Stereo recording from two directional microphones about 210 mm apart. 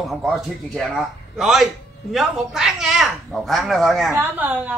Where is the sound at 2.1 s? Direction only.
Centre (ahead or behind).